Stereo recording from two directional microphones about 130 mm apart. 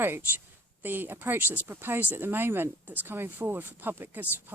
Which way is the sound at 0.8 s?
15° right (ahead or behind).